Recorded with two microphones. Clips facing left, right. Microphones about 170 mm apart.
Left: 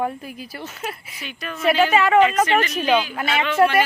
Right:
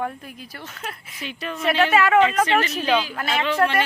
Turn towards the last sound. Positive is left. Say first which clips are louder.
# left 3 dB
turn(degrees=5)  # may be behind; listen again after turning